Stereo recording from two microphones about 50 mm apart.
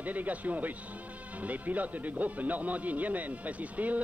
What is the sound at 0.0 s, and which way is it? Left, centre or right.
Speech, right.